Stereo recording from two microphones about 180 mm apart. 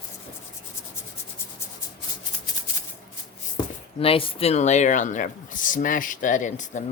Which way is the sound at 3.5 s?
30° left (ahead or behind).